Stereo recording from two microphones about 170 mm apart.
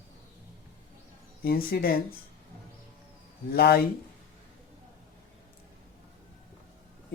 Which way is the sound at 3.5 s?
65° left (ahead or behind).